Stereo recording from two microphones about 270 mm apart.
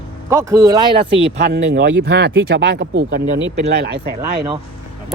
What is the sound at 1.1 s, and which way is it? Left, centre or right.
Speech, right.